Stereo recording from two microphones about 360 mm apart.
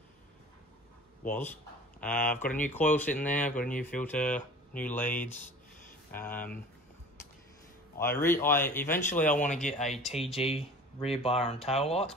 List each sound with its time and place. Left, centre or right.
1.2 s speech: centre
8.0 s speech: centre
9.7 s speech: centre